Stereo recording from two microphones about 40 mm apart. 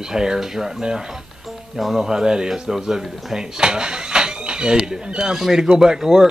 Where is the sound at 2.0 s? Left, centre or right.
Centre.